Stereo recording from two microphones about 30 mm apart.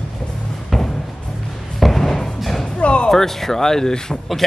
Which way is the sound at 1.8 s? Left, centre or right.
Centre.